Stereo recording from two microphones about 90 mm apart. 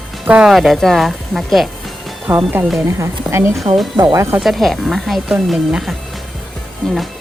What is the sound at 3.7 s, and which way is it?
Speech, 65° right (ahead or behind).